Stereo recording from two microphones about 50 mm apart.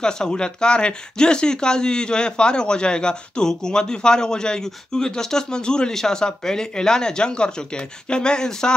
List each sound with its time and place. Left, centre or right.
0.0 s speech: centre